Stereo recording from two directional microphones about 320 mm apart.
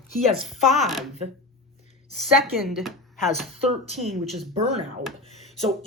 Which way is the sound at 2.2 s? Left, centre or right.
Centre.